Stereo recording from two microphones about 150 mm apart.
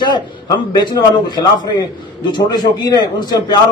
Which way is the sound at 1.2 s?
30° left (ahead or behind).